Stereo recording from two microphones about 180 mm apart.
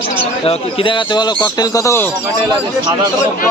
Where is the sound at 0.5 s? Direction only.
30° left (ahead or behind).